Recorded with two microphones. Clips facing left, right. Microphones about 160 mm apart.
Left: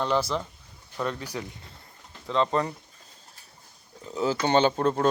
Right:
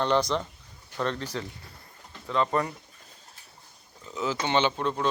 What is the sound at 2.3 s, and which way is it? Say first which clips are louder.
Speech: left 1 dB; 25° left (ahead or behind).